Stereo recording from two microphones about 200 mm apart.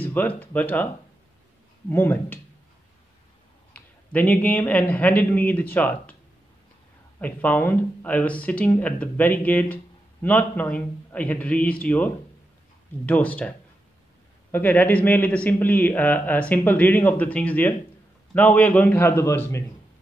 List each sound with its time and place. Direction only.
0.0 s a man's voice: 10° left (ahead or behind)
1.9 s a man's voice: 10° left (ahead or behind)
3.7 s a man's voice: 10° left (ahead or behind)
7.2 s a man's voice: 5° left (ahead or behind)